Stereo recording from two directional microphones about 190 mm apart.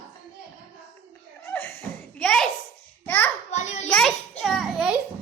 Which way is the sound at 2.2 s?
5° left (ahead or behind).